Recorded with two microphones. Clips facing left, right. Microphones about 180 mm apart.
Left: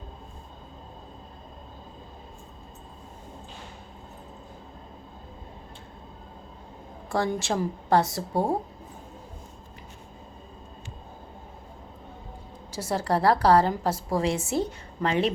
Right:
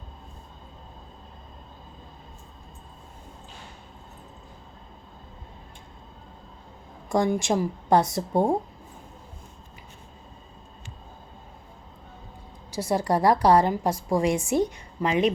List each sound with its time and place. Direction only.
7.1 s a woman's voice: 15° right (ahead or behind)
12.7 s a woman's voice: 10° right (ahead or behind)